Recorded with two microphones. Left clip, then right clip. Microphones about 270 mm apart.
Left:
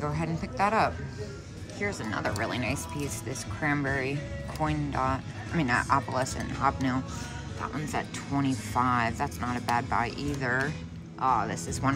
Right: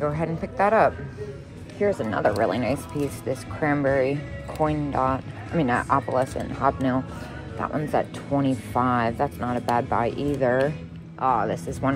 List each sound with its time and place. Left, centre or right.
0.0 s speech: centre